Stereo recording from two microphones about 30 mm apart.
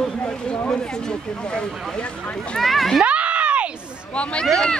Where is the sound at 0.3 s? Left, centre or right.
Left.